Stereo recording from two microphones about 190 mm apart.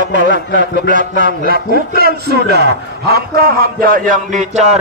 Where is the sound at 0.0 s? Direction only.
45° right (ahead or behind).